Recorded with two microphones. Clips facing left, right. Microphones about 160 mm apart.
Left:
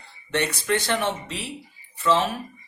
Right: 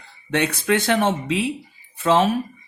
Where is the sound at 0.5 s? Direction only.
60° right (ahead or behind).